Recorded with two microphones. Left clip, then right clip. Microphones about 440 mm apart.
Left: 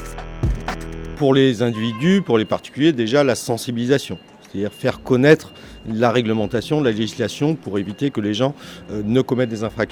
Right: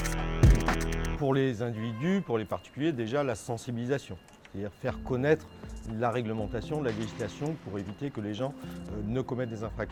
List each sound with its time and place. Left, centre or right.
0.0 s music: centre
1.2 s speech: right